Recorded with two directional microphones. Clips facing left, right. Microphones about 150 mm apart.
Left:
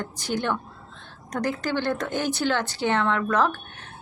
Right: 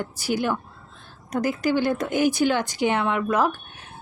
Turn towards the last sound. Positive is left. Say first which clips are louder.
# right 1 dB
turn(degrees=-10)  # may be behind; listen again after turning